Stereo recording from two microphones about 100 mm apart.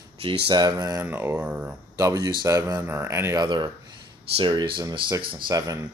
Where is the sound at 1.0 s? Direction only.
20° right (ahead or behind).